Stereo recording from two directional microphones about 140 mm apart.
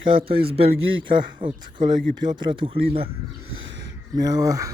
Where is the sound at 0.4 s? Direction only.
45° right (ahead or behind).